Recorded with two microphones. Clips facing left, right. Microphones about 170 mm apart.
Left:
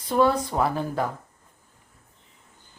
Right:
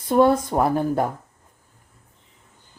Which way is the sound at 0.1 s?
50° right (ahead or behind).